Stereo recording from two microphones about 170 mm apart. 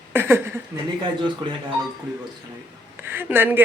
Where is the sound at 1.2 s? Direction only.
25° right (ahead or behind).